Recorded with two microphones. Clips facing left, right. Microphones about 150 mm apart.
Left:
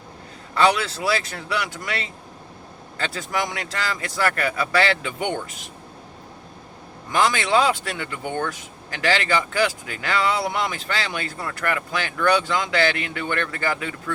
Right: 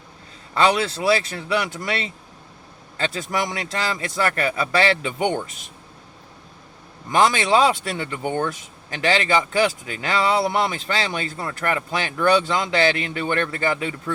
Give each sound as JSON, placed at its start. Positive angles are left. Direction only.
{"t": 0.5, "sound": "speech", "side_deg": -25}
{"t": 7.1, "sound": "speech", "side_deg": -25}